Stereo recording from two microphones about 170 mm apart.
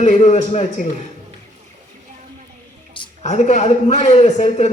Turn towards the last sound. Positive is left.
turn(degrees=40)  # may be behind; listen again after turning